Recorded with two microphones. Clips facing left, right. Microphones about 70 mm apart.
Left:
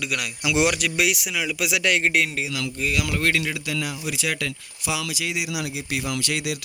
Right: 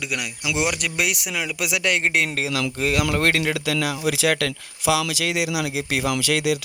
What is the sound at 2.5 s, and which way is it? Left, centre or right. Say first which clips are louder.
A man's voice: right 3 dB; right.